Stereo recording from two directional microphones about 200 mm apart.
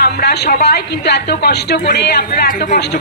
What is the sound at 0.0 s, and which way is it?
A woman's voice, 55° left (ahead or behind).